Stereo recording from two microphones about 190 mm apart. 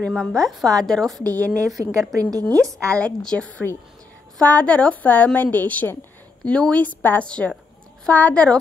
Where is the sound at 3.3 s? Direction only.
5° left (ahead or behind).